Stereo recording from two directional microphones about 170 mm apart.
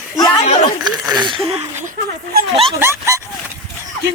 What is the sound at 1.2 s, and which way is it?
Speech, 30° right (ahead or behind).